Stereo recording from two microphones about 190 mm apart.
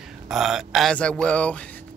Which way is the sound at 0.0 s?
Centre (ahead or behind).